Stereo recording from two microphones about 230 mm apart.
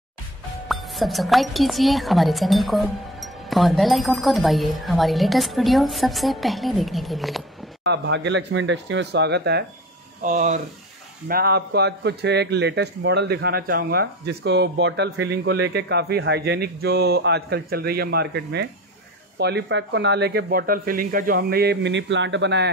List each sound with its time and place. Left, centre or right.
0.7 s speech: centre
7.8 s a man's voice: right
10.2 s a man's voice: right